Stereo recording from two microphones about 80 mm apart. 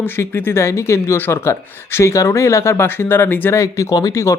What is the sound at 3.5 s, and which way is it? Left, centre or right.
Speech, left.